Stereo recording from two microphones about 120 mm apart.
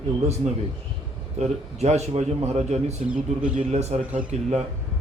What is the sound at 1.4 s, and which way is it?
A man's voice, 65° right (ahead or behind).